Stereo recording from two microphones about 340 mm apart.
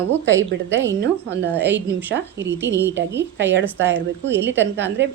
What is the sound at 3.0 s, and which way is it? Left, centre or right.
A woman's voice, right.